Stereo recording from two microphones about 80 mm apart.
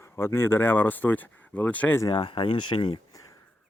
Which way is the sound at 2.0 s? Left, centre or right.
Left.